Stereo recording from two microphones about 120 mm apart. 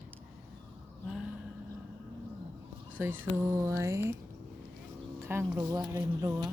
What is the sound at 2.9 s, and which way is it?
Speech, 15° right (ahead or behind).